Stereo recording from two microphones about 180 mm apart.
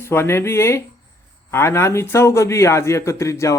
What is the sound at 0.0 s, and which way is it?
A man's voice, 15° left (ahead or behind).